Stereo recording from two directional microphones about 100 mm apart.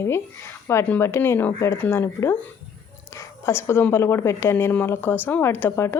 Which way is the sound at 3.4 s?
25° left (ahead or behind).